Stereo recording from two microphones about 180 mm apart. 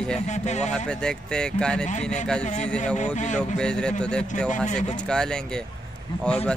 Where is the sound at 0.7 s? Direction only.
5° left (ahead or behind).